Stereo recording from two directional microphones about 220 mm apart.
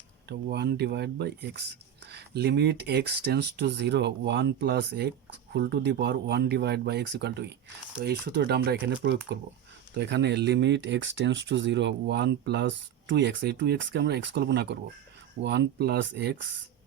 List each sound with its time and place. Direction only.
0.3 s speech: 50° right (ahead or behind)